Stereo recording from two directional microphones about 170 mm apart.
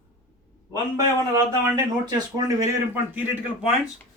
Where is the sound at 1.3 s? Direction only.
20° right (ahead or behind).